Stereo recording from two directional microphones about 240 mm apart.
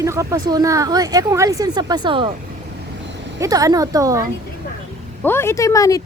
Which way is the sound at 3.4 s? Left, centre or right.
Centre.